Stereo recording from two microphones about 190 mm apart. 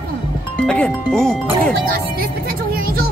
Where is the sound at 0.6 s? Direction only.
5° left (ahead or behind).